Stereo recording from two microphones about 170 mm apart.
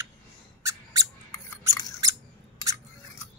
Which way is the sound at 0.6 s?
20° right (ahead or behind).